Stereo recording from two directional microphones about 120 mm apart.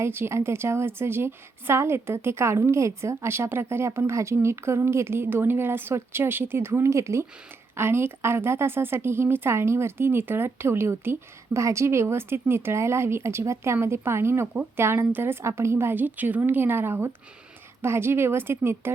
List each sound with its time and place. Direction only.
0.0 s a woman's voice: 20° right (ahead or behind)